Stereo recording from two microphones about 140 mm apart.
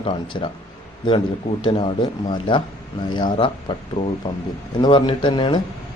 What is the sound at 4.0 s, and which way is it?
Speech, 45° left (ahead or behind).